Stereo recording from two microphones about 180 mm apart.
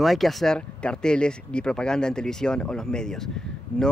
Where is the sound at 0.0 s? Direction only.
Centre (ahead or behind).